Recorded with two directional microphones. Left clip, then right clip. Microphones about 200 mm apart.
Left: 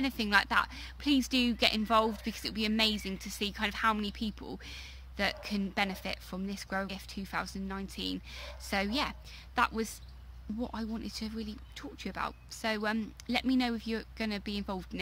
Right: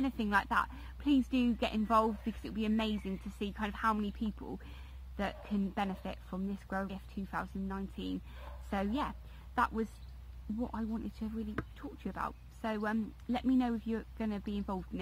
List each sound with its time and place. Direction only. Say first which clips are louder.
0.0 s a woman's voice: left 4 dB; 10° left (ahead or behind)